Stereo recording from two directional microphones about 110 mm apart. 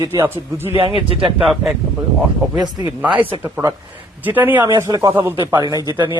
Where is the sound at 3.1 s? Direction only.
50° right (ahead or behind).